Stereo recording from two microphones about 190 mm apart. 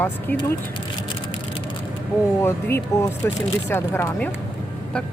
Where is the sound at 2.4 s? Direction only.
15° left (ahead or behind).